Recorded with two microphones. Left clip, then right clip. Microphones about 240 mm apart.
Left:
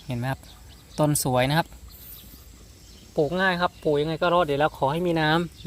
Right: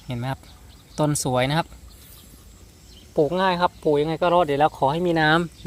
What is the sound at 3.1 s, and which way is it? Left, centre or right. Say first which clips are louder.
Speech: right 3 dB; centre.